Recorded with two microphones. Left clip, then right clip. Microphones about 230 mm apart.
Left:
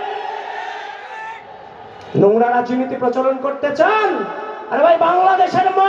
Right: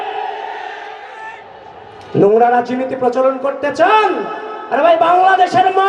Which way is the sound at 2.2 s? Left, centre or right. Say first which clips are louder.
Right 3 dB; right.